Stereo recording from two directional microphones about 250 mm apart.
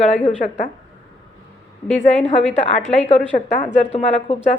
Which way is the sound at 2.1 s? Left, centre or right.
Left.